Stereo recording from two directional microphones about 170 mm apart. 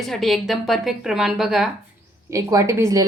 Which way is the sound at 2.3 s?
20° right (ahead or behind).